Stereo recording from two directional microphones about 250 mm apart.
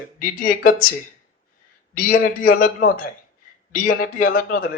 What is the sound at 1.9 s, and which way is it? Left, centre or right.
Speech, left.